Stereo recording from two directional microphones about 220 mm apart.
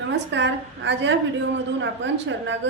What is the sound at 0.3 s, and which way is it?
A woman's voice, 55° right (ahead or behind).